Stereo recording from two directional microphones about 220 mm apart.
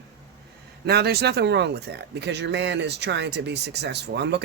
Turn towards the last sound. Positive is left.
turn(degrees=-50)  # may be behind; listen again after turning